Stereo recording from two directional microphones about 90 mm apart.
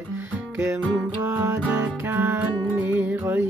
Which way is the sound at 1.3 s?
25° right (ahead or behind).